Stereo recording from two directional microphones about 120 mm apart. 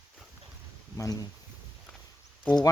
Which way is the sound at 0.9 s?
30° left (ahead or behind).